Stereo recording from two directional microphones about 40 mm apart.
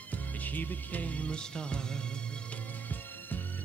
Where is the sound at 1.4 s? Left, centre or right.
Left.